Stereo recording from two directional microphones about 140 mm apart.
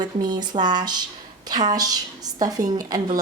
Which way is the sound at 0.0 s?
30° right (ahead or behind).